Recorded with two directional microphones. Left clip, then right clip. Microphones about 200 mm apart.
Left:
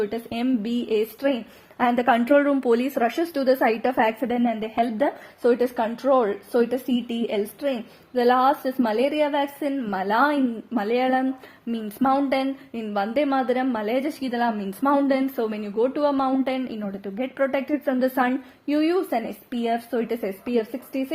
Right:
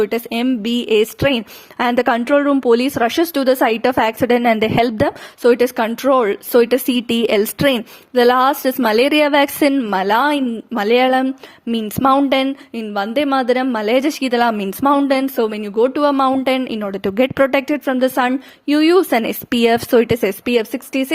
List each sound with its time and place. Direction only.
0.0 s speech: 35° right (ahead or behind)